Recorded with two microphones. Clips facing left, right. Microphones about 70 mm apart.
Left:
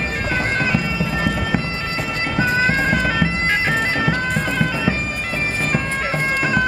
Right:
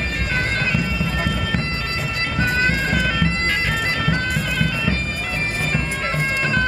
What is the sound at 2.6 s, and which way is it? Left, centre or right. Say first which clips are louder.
Bagpipes: left 2 dB; centre.